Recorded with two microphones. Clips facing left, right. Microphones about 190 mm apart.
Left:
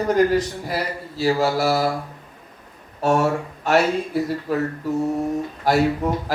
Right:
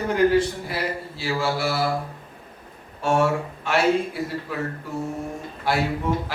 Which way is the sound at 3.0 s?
40° left (ahead or behind).